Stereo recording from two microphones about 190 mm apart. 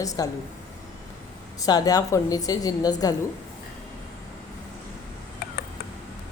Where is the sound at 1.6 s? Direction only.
20° left (ahead or behind).